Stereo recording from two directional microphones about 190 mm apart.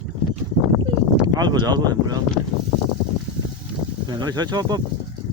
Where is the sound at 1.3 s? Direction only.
20° right (ahead or behind).